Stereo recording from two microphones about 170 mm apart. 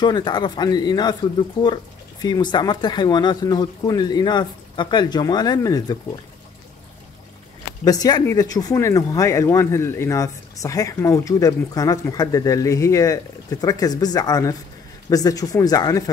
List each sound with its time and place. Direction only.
0.0 s speech: 25° left (ahead or behind)
7.8 s speech: 20° left (ahead or behind)